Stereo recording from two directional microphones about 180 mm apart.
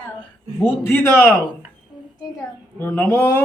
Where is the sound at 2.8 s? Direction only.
10° left (ahead or behind).